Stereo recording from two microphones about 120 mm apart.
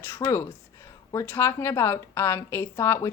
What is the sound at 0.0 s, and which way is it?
Speech, 25° left (ahead or behind).